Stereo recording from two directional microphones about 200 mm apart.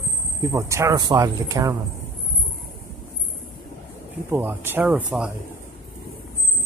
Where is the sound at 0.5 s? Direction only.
15° right (ahead or behind).